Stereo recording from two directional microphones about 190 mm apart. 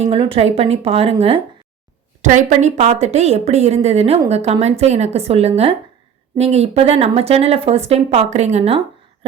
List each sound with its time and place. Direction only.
0.0 s speech: 30° right (ahead or behind)